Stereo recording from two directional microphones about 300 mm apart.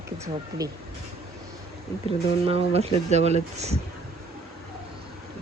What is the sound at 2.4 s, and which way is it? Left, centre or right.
Speech, centre.